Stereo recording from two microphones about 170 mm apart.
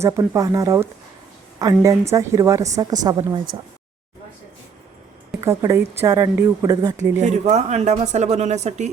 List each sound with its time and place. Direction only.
0.0 s a woman's voice: 20° right (ahead or behind)
5.4 s speech: 15° right (ahead or behind)
7.2 s speech: 45° right (ahead or behind)